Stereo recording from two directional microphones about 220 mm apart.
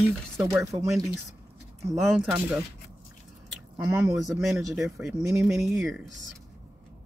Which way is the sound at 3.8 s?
10° right (ahead or behind).